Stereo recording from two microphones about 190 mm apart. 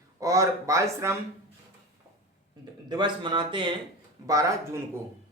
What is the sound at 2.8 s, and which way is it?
A man's voice, 25° right (ahead or behind).